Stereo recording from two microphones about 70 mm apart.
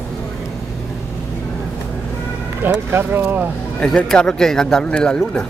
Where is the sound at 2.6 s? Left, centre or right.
Right.